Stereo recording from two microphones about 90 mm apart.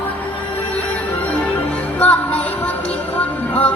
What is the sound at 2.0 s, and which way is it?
Music, 15° left (ahead or behind).